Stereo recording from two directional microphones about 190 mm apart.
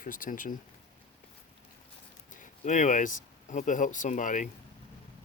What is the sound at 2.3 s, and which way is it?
Speech, 40° left (ahead or behind).